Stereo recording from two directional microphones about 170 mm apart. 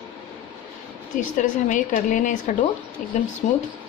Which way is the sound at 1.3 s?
50° left (ahead or behind).